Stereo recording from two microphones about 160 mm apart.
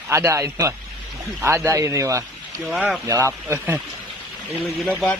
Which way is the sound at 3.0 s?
15° right (ahead or behind).